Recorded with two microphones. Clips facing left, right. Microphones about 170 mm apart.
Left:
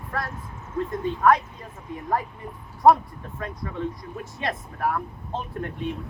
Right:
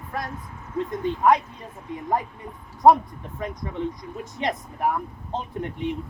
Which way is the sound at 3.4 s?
20° right (ahead or behind).